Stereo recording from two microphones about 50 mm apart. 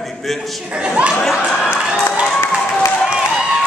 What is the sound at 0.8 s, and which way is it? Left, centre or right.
Speech, right.